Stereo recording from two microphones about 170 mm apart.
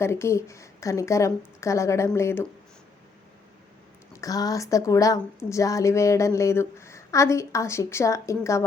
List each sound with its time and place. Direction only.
0.0 s speech: 15° left (ahead or behind)
4.1 s speech: 20° left (ahead or behind)